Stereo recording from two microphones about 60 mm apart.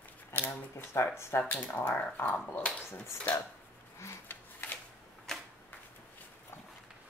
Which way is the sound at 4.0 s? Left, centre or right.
Left.